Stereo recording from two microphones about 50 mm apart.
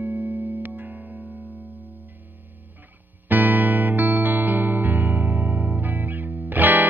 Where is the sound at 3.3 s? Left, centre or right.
Right.